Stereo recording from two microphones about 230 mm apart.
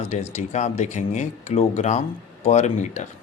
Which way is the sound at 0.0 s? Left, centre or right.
Left.